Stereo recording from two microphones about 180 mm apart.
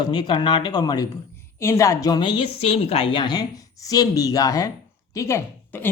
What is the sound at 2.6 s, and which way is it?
A man's voice, 35° left (ahead or behind).